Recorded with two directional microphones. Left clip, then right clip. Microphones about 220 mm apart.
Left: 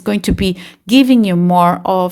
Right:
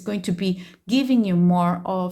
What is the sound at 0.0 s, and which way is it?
Speech, 30° left (ahead or behind).